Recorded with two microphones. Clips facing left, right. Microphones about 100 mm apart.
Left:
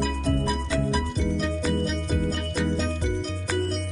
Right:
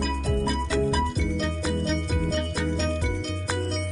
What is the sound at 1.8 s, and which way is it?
Music, centre (ahead or behind).